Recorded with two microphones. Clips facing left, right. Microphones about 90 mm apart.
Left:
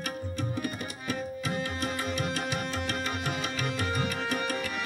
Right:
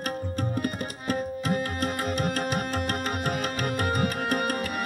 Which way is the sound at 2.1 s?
45° right (ahead or behind).